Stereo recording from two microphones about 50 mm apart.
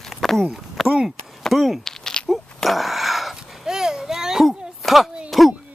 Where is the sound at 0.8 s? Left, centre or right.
Centre.